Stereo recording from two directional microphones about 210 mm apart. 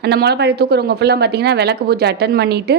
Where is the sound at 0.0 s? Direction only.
50° right (ahead or behind).